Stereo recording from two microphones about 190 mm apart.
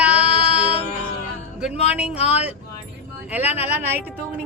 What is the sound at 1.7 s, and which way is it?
Speech, 30° left (ahead or behind).